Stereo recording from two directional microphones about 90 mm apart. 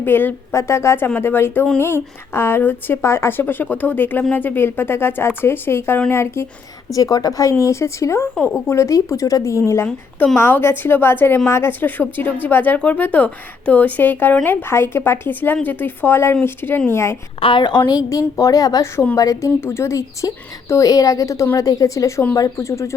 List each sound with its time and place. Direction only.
0.0 s a woman's voice: 20° left (ahead or behind)
6.9 s a woman's voice: 40° left (ahead or behind)
17.4 s a woman's voice: 60° left (ahead or behind); by 23.0 s 35° left (ahead or behind)